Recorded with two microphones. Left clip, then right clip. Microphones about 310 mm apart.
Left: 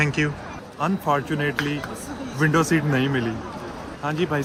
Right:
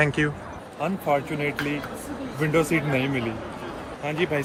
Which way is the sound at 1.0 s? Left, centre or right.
Left.